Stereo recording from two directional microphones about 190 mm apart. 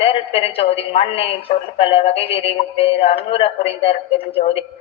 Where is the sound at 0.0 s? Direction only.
30° left (ahead or behind).